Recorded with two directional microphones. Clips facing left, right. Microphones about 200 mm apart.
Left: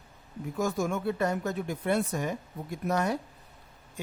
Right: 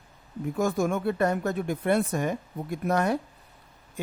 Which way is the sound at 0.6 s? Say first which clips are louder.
Right 3 dB; 55° right (ahead or behind).